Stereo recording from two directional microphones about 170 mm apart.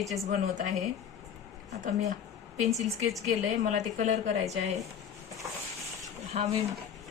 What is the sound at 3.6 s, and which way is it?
A woman's voice, 45° right (ahead or behind).